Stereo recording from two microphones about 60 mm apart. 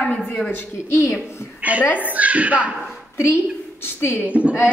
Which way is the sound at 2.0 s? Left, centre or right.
Right.